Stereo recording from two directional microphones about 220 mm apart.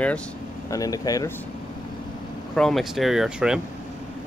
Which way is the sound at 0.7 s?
15° left (ahead or behind).